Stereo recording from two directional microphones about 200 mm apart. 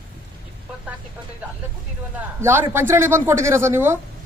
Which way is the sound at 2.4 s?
10° right (ahead or behind).